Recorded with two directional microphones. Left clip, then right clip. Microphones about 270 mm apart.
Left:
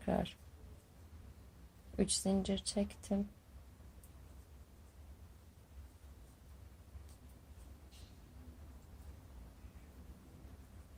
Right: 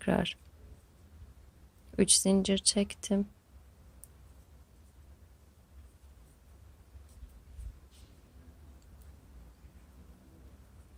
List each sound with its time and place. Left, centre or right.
0.0 s speech: right
2.0 s speech: right